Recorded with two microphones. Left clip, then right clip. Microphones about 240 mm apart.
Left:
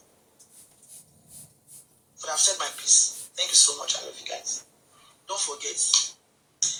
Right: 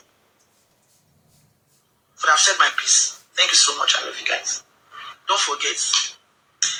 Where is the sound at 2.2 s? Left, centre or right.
Right.